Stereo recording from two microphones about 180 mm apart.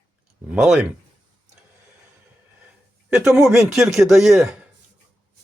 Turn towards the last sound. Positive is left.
turn(degrees=0)  # may be behind; listen again after turning